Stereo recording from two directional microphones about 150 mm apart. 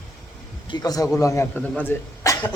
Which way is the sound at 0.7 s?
25° left (ahead or behind).